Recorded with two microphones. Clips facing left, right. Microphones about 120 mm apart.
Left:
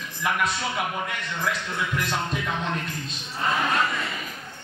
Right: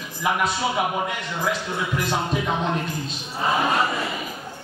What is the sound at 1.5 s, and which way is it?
Music, 30° right (ahead or behind).